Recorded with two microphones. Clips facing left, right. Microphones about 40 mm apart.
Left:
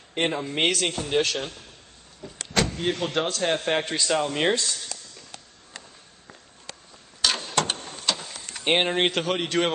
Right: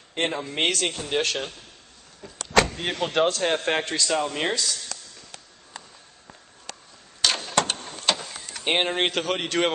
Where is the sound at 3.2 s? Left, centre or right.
Centre.